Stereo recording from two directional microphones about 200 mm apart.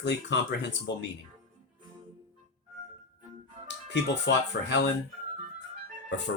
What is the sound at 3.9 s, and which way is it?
Speech, 60° left (ahead or behind).